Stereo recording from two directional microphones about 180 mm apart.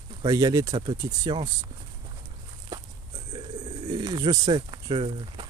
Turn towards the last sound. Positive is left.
turn(degrees=-30)  # may be behind; listen again after turning